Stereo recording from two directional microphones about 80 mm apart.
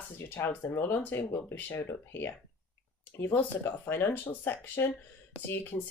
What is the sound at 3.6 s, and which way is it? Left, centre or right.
Speech, left.